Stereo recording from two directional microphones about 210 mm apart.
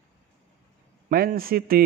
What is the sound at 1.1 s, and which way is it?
Speech, 45° right (ahead or behind).